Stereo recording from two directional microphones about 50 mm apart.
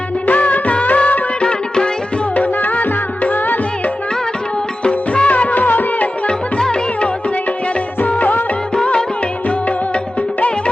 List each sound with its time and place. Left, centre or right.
0.3 s music of bollywood: left
1.5 s music: centre
2.3 s music: left
4.8 s music: left
6.2 s music: centre
8.0 s music of bollywood: left
8.7 s music: centre